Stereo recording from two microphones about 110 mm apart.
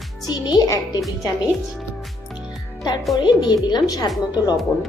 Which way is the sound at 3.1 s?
40° left (ahead or behind).